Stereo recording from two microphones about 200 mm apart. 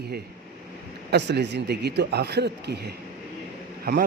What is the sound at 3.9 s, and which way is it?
Speech, 55° right (ahead or behind).